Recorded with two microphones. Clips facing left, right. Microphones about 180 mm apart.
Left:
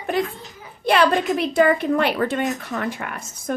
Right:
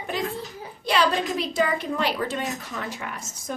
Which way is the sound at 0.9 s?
55° left (ahead or behind).